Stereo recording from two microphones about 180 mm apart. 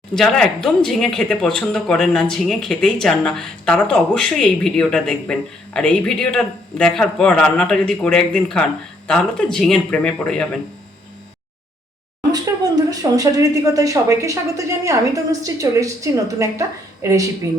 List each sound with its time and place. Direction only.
0.2 s speech: centre (ahead or behind)
12.9 s speech: 20° right (ahead or behind)